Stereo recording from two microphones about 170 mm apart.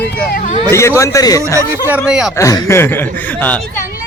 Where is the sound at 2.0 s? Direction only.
5° right (ahead or behind).